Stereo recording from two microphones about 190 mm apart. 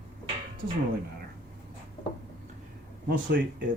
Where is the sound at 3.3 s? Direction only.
55° right (ahead or behind).